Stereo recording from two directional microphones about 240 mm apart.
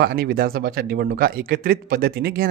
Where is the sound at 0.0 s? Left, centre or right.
Right.